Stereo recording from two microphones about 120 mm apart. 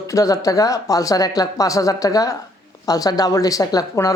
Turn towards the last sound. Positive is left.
turn(degrees=30)  # may be behind; listen again after turning